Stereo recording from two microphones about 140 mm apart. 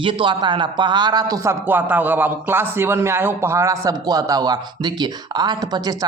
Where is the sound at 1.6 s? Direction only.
15° right (ahead or behind).